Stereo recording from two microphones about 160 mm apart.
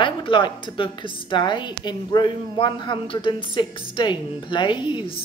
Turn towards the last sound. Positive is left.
turn(degrees=30)  # may be behind; listen again after turning